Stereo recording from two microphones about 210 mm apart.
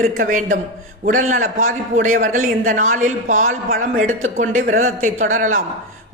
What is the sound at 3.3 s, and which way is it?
Speech, 70° right (ahead or behind).